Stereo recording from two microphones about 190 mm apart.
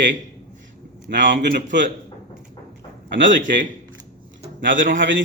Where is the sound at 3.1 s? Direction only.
75° right (ahead or behind).